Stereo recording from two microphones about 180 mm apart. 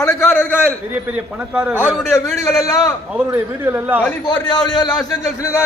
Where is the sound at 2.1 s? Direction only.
15° left (ahead or behind).